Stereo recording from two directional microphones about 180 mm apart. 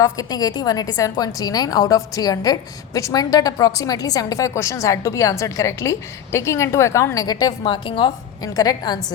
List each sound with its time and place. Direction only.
0.0 s a woman's voice: 20° left (ahead or behind)